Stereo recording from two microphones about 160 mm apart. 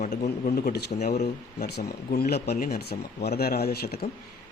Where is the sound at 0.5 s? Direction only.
80° left.